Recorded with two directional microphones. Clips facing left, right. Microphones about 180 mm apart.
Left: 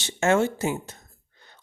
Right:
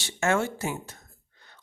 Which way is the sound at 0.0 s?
25° left (ahead or behind).